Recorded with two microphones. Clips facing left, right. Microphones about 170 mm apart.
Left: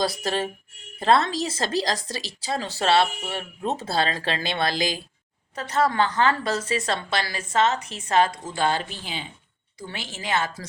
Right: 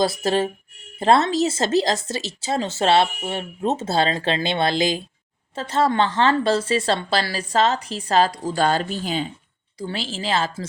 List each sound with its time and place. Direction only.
0.0 s a woman's voice: 25° right (ahead or behind); by 9.2 s 45° right (ahead or behind)
9.7 s a woman's voice: 30° right (ahead or behind)